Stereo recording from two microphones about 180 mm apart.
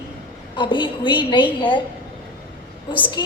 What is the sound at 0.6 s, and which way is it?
Speech, 25° left (ahead or behind).